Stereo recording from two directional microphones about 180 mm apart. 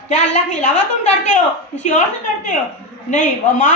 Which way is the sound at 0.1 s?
40° left (ahead or behind).